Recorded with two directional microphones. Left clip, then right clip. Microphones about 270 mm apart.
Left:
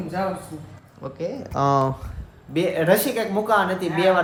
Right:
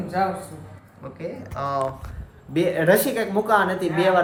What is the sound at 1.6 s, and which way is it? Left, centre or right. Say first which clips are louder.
Speech: left 7 dB; left.